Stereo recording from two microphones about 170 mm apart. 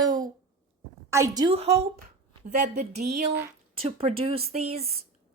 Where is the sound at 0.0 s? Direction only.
25° right (ahead or behind).